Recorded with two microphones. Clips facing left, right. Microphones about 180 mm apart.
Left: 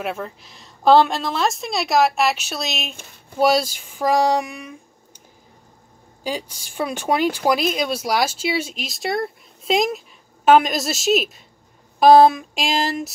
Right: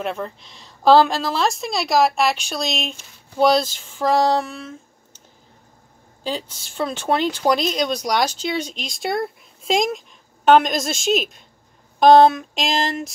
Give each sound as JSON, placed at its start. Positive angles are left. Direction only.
{"t": 0.0, "sound": "speech", "side_deg": 5}
{"t": 6.2, "sound": "speech", "side_deg": 10}